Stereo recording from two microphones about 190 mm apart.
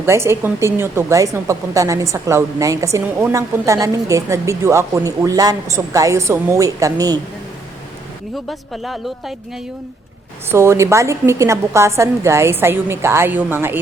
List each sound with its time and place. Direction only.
0.0 s a woman's voice: 15° right (ahead or behind)
8.4 s speech: centre (ahead or behind)
10.5 s a woman's voice: 15° right (ahead or behind)